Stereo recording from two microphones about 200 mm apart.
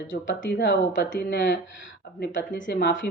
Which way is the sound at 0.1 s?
70° left (ahead or behind).